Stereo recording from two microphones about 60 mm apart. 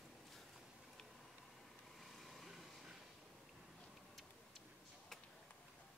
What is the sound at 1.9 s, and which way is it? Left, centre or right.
Vehicle, centre.